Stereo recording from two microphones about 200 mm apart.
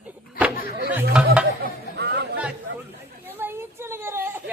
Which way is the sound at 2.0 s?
55° right (ahead or behind).